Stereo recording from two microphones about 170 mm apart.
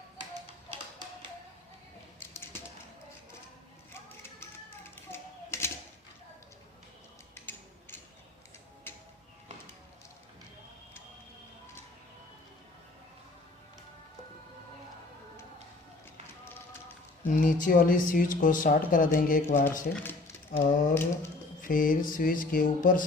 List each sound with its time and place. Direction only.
2.3 s typewriter: 15° left (ahead or behind)
5.1 s typewriter: 15° left (ahead or behind)
7.3 s music: 15° left (ahead or behind)
17.2 s speech: 50° left (ahead or behind)
20.1 s speech: 15° left (ahead or behind)
21.6 s speech: 55° left (ahead or behind)